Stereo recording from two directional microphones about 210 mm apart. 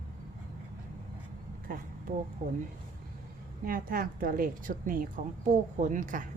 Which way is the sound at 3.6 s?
45° right (ahead or behind).